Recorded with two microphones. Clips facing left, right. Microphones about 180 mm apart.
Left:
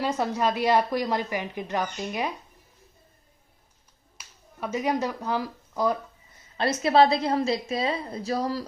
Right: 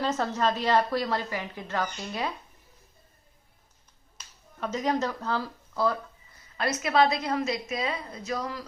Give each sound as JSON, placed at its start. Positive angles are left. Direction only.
{"t": 0.0, "sound": "speech", "side_deg": 10}
{"t": 4.2, "sound": "finger snapping", "side_deg": 10}
{"t": 6.6, "sound": "a woman's voice", "side_deg": 30}